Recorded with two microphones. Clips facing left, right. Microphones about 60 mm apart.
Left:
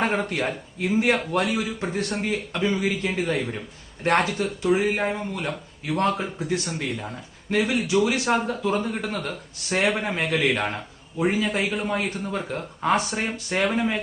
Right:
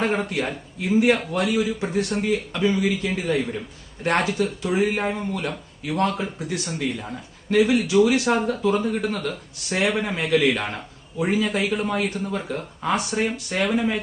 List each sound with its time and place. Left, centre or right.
0.3 s a man's voice: left